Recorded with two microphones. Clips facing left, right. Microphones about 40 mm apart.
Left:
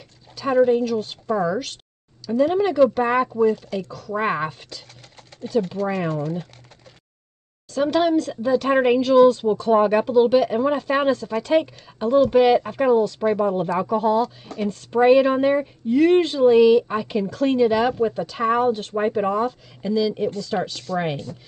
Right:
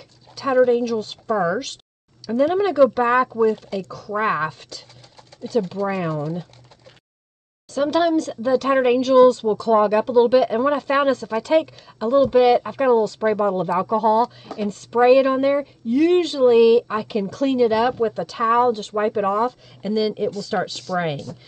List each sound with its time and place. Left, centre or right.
0.3 s dog: left
0.7 s speech: centre
1.3 s speech: centre
5.9 s speech: centre
7.7 s speech: centre
9.7 s speech: centre
10.1 s speech: centre
12.6 s speech: centre
16.0 s speech: centre
16.3 s speech: centre